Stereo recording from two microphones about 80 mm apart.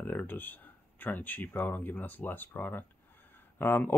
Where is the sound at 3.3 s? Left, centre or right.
Left.